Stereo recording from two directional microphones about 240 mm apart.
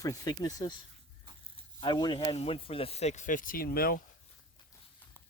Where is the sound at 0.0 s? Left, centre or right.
Centre.